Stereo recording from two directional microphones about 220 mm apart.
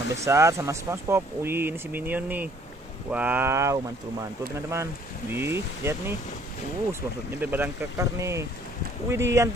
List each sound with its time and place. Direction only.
0.1 s speech: 10° right (ahead or behind)